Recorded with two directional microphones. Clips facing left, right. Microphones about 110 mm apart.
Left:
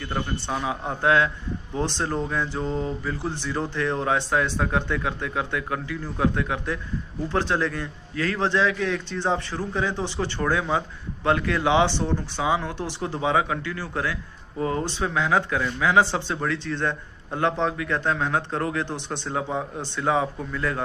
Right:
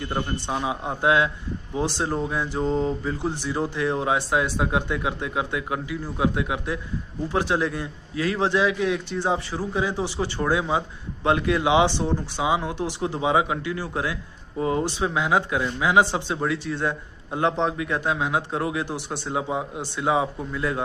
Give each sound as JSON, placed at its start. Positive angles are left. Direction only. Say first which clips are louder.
{"t": 0.0, "sound": "a man's voice", "louder": "right 1 dB", "side_deg": -20}